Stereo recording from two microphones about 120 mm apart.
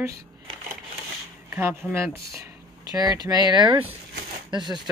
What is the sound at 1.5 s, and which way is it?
Speech, 20° right (ahead or behind).